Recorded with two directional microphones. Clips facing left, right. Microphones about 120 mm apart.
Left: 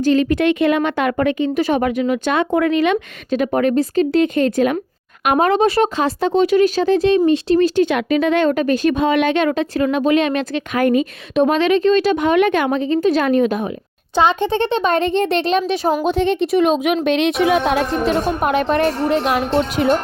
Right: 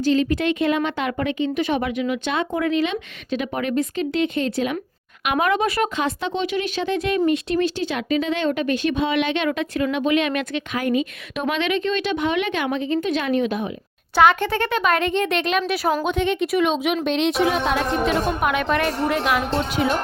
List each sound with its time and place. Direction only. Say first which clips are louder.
0.0 s speech: left 5 dB; 55° left (ahead or behind)
2.4 s speech: left 5 dB; 60° left (ahead or behind)
3.2 s speech: left 8 dB; 45° left (ahead or behind)
5.2 s speech: left 6 dB; 40° left (ahead or behind)
7.8 s speech: left 7 dB; 60° left (ahead or behind); by 10.6 s 35° left (ahead or behind)
10.8 s speech: left 6 dB; 50° left (ahead or behind)
11.3 s speech: left 8 dB; 40° left (ahead or behind)
14.2 s a child's voice: left 1 dB; 20° left (ahead or behind); by 17.8 s 55° left (ahead or behind)
18.0 s speech: left 3 dB; 40° left (ahead or behind)
19.5 s speech: left 6 dB; 45° left (ahead or behind)